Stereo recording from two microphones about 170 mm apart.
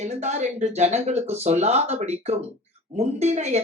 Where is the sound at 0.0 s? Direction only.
40° right (ahead or behind).